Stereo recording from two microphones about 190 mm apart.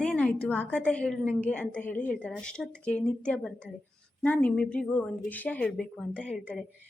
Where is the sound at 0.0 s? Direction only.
5° left (ahead or behind).